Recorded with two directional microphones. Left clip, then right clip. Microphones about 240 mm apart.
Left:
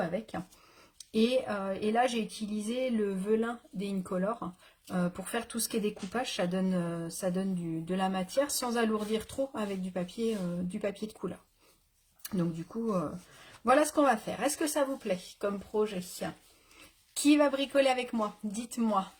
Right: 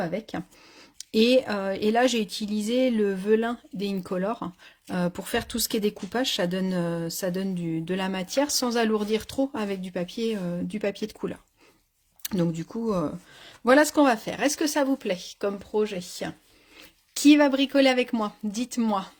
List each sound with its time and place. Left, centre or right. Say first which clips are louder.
0.0 s speech: right 4 dB; right